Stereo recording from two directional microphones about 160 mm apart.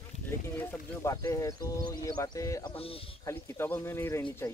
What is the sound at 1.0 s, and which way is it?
Speech, 15° left (ahead or behind).